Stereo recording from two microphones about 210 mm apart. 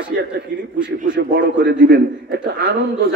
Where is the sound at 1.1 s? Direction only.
55° right (ahead or behind).